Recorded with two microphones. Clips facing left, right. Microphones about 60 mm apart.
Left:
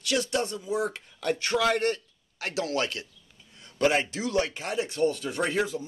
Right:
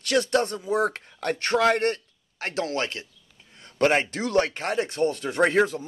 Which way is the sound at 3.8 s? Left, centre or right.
Right.